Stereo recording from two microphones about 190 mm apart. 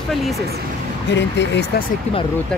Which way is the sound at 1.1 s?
65° left (ahead or behind).